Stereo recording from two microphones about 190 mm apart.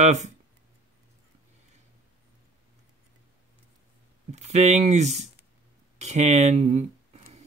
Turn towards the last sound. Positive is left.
turn(degrees=-35)  # may be behind; listen again after turning